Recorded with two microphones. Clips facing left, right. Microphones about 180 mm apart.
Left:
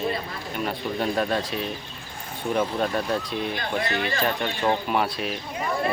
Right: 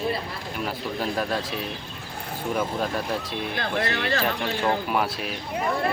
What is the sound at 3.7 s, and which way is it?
Speech, 65° right (ahead or behind).